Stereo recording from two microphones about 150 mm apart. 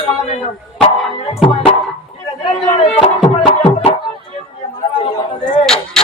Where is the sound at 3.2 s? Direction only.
40° left (ahead or behind).